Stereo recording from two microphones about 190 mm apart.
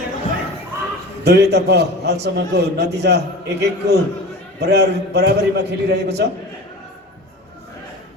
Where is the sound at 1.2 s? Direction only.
60° right (ahead or behind).